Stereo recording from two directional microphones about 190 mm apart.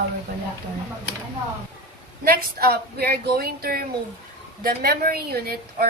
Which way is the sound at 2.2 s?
50° right (ahead or behind).